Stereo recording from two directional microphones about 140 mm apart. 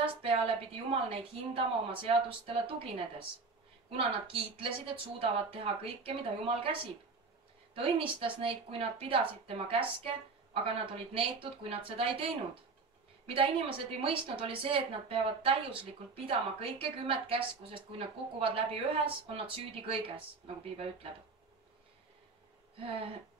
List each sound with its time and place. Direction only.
0.8 s a woman's voice: 40° right (ahead or behind)
7.7 s a woman's voice: 40° right (ahead or behind)
13.3 s a woman's voice: 40° right (ahead or behind)